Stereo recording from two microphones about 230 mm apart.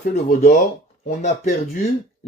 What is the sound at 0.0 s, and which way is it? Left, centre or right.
Speech, left.